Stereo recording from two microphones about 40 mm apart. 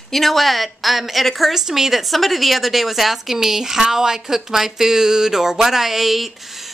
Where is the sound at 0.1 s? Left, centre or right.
Centre.